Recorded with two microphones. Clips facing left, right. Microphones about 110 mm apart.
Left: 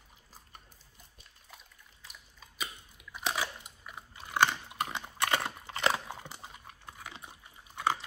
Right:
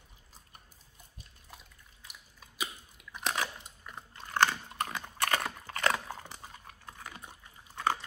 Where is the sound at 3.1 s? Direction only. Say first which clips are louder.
Even; 5° left (ahead or behind).